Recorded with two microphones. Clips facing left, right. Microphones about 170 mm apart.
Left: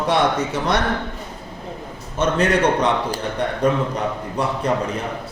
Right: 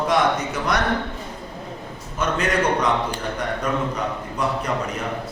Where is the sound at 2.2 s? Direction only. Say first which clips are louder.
Left 4 dB; 30° left (ahead or behind).